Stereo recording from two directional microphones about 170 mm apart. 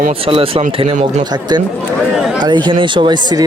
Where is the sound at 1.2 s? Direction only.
25° right (ahead or behind).